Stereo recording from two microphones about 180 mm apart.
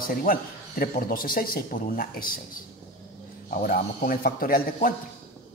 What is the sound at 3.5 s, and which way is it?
Speech, 50° left (ahead or behind).